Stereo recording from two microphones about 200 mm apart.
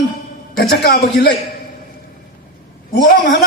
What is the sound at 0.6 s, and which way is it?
Speech, 55° left (ahead or behind).